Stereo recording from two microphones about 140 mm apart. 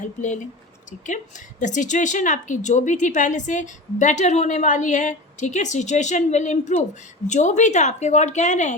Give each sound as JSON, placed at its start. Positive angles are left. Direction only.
{"t": 0.0, "sound": "a woman's voice", "side_deg": 60}